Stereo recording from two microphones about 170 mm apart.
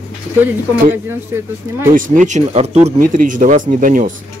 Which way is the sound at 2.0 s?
50° right (ahead or behind).